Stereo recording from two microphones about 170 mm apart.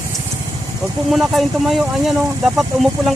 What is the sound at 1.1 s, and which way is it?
Speech, centre (ahead or behind).